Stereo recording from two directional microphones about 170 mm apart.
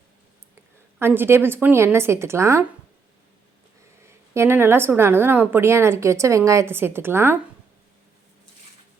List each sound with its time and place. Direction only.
0.9 s a woman's voice: 15° right (ahead or behind)
4.0 s a woman's voice: 15° right (ahead or behind)